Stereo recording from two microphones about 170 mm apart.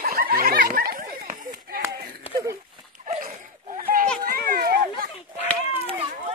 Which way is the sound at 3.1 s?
40° right (ahead or behind).